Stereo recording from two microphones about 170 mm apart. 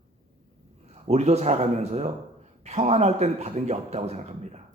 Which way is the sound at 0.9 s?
40° right (ahead or behind).